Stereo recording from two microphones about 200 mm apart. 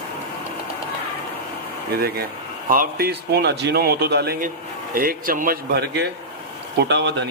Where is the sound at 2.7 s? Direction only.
45° right (ahead or behind).